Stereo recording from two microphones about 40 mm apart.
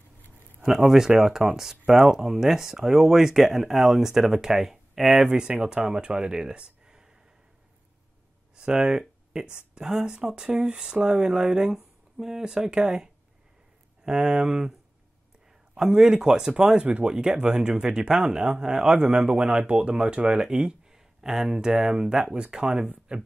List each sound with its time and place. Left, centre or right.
0.7 s speech: centre
5.9 s speech: right
8.5 s speech: right